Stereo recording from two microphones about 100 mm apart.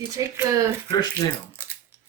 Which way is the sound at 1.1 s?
25° right (ahead or behind).